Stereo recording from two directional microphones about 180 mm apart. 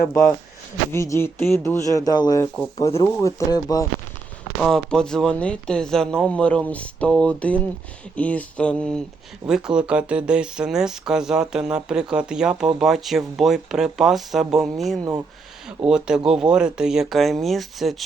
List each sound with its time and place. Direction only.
0.9 s speech: 15° left (ahead or behind)
4.6 s speech: 5° left (ahead or behind)